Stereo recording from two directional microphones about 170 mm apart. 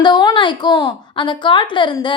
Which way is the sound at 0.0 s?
25° left (ahead or behind).